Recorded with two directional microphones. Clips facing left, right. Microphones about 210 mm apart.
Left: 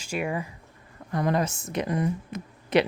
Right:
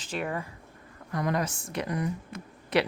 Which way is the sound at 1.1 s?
30° left (ahead or behind).